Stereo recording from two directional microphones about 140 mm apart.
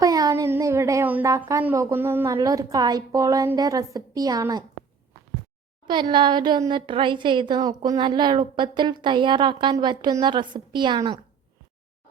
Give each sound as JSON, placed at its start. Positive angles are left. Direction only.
{"t": 0.0, "sound": "a sound", "side_deg": -25}
{"t": 1.5, "sound": "a woman's voice", "side_deg": -20}
{"t": 5.9, "sound": "a woman's voice", "side_deg": -35}